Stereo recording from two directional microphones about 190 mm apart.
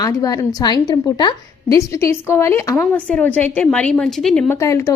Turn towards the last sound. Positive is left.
turn(degrees=15)  # may be behind; listen again after turning